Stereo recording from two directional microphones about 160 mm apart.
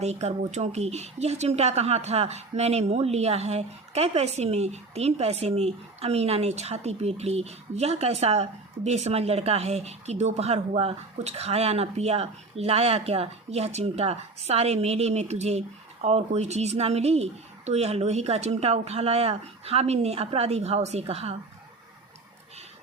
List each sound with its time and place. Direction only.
0.0 s speech: 45° right (ahead or behind)